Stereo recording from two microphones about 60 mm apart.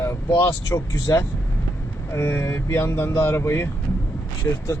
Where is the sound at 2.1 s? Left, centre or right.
Left.